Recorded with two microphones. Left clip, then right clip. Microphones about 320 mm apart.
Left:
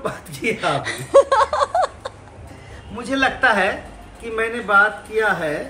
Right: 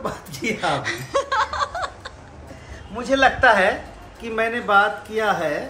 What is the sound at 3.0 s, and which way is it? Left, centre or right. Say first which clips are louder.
A man's voice: right 2 dB; right.